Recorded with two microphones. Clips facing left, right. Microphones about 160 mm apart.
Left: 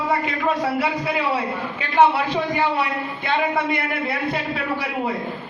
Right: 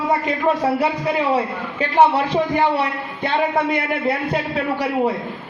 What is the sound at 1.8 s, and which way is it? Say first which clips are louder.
Speech: right 2 dB; 40° right (ahead or behind).